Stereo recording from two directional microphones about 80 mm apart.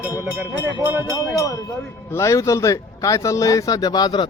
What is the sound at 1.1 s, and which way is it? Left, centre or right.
Speech, left.